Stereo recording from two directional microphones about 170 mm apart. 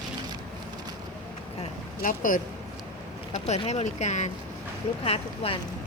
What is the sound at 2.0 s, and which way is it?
Speech, 50° left (ahead or behind).